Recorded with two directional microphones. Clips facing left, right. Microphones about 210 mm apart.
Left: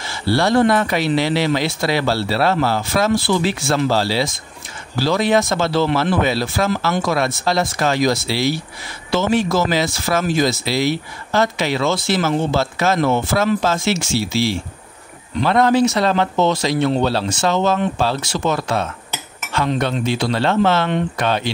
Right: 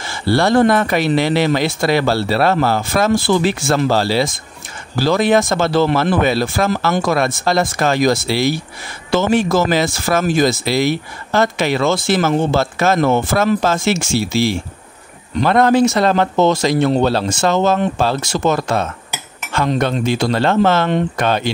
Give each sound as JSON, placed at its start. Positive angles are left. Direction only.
{"t": 0.0, "sound": "speech", "side_deg": -50}